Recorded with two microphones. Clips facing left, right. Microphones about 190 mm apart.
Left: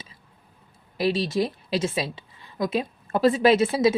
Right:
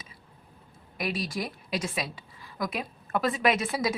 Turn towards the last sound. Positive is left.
turn(degrees=30)  # may be behind; listen again after turning